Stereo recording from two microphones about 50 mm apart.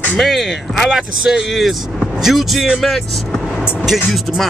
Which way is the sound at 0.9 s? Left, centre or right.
Centre.